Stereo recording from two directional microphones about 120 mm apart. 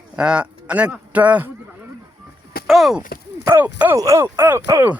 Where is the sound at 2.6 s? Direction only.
Centre (ahead or behind).